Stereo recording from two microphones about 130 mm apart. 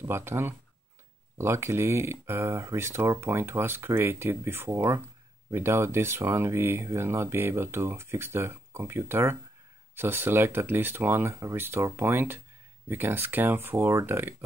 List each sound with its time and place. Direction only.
0.0 s speech: 15° right (ahead or behind)